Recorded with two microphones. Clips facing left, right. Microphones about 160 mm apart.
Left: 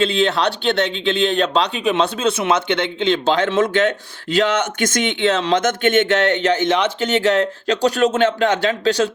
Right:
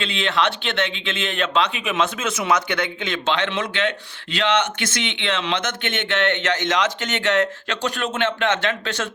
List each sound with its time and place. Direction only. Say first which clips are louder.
0.0 s a man's voice: left 5 dB; 40° left (ahead or behind)